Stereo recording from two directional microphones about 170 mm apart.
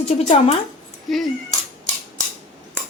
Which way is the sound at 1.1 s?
Centre (ahead or behind).